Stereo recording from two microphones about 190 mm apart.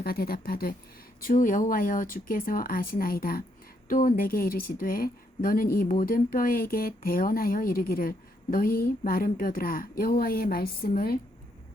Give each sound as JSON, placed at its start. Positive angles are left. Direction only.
{"t": 0.0, "sound": "a woman's voice", "side_deg": 50}